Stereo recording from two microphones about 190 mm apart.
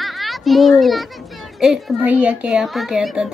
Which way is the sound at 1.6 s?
5° right (ahead or behind).